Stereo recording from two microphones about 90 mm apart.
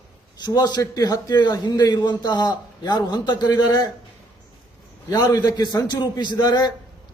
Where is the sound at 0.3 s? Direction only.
50° left (ahead or behind).